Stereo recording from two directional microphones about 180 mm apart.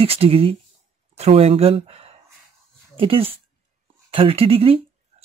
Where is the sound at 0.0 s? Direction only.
35° right (ahead or behind).